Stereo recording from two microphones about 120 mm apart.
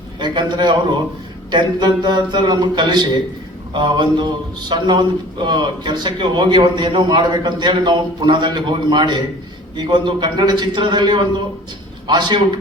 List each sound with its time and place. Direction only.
0.2 s a man's voice: 40° right (ahead or behind)